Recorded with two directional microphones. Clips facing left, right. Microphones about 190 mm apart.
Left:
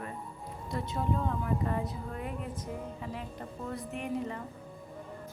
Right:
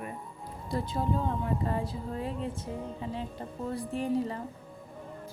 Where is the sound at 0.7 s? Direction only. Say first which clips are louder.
Right 2 dB; 35° right (ahead or behind).